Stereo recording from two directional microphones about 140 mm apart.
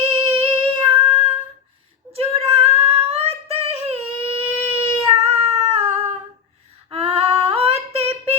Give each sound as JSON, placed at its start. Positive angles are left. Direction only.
{"t": 0.0, "sound": "singing", "side_deg": -40}
{"t": 2.1, "sound": "singing", "side_deg": -45}
{"t": 6.9, "sound": "female singing", "side_deg": -45}
{"t": 7.4, "sound": "a sound", "side_deg": -45}